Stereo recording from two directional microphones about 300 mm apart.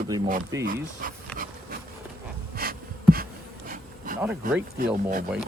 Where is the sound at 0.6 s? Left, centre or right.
Right.